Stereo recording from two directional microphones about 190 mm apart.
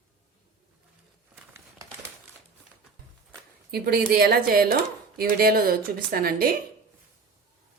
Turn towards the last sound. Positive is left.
turn(degrees=-50)  # may be behind; listen again after turning